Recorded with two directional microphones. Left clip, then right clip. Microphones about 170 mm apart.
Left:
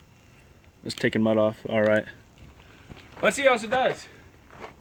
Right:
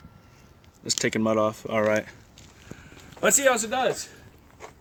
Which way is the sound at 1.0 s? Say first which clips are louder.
Left 2 dB; 35° left (ahead or behind).